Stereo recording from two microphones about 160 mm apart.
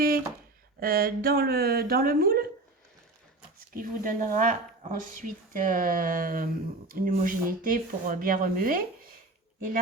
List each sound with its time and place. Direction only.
0.8 s speech: 65° right (ahead or behind)
3.8 s speech: 55° right (ahead or behind)